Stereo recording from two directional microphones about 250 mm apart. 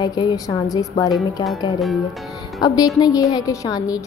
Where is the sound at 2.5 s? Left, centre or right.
Centre.